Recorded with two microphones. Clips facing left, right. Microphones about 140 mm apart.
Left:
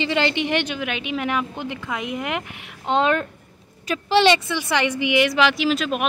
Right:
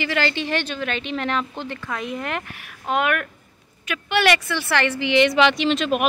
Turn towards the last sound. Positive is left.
turn(degrees=0)  # may be behind; listen again after turning